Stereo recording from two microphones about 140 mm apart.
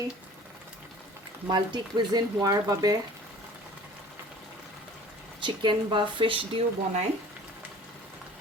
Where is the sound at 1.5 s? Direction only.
30° right (ahead or behind).